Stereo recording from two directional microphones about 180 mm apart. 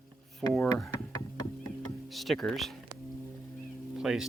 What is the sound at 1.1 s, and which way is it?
Music, 20° left (ahead or behind).